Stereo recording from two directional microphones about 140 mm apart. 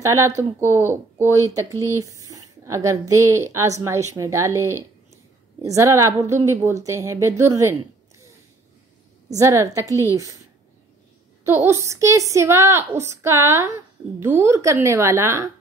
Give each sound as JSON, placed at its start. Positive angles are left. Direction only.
{"t": 0.1, "sound": "a woman's voice", "side_deg": -20}
{"t": 9.3, "sound": "speech", "side_deg": -20}
{"t": 11.4, "sound": "speech", "side_deg": -20}